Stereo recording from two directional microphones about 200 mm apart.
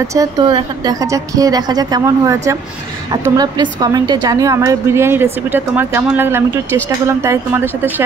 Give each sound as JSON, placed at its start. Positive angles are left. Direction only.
{"t": 0.1, "sound": "a woman's voice", "side_deg": -20}